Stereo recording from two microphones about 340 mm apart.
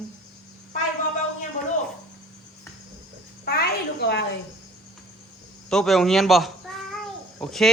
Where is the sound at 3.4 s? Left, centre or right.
Left.